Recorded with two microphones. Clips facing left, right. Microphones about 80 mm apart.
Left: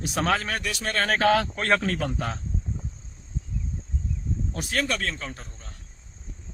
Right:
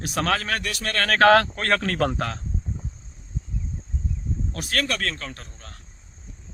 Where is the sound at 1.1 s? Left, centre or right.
Right.